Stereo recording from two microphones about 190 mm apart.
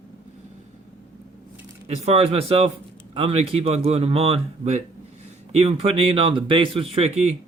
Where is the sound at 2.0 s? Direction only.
35° right (ahead or behind).